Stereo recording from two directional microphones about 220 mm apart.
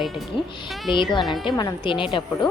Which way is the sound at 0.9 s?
20° left (ahead or behind).